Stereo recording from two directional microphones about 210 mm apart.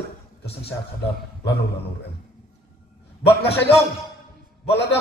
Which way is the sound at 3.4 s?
50° left (ahead or behind).